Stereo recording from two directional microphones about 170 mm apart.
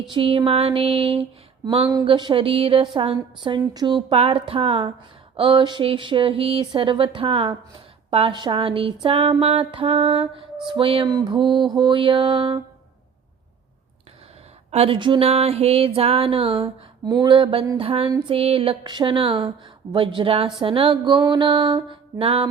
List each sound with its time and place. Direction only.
0.1 s speech: 30° right (ahead or behind)
14.7 s speech: 35° right (ahead or behind)